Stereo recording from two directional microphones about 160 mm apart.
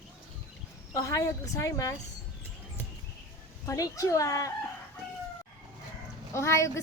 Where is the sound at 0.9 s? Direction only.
20° left (ahead or behind).